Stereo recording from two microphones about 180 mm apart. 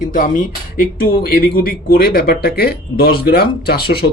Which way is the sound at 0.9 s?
55° left (ahead or behind).